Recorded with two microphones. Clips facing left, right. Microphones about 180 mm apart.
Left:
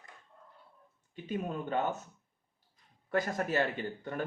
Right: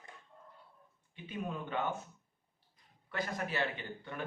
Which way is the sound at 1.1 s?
45° left (ahead or behind).